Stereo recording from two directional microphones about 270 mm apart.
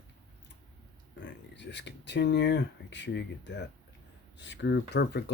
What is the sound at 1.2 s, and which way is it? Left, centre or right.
Speech, left.